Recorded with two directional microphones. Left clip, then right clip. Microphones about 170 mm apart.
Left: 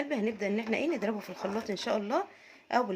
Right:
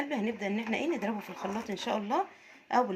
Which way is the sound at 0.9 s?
25° left (ahead or behind).